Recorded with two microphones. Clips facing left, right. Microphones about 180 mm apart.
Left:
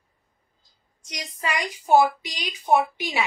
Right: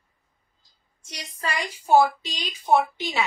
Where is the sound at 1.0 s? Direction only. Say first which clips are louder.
Left 2 dB; 15° left (ahead or behind).